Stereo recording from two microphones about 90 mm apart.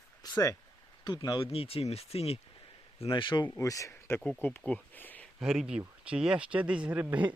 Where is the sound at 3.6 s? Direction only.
40° left (ahead or behind).